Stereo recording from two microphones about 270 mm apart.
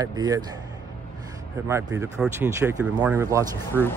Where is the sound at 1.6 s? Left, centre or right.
Centre.